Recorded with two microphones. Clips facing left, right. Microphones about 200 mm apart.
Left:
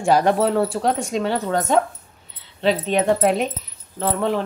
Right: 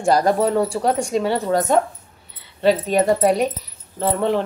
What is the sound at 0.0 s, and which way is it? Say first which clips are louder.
Speech: even; centre (ahead or behind).